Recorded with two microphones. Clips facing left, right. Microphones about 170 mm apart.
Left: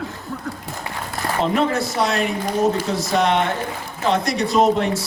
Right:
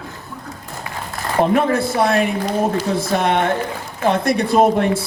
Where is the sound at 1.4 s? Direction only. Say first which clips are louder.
Right 4 dB; 55° right (ahead or behind).